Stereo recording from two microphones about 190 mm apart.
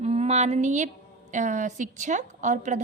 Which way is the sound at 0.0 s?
35° right (ahead or behind).